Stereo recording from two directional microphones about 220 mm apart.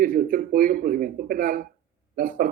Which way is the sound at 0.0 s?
35° right (ahead or behind).